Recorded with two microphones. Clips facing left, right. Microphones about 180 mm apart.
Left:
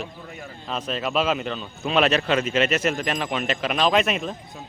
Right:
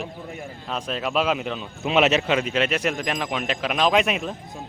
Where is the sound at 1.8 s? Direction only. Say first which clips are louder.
Right 1 dB; 15° right (ahead or behind).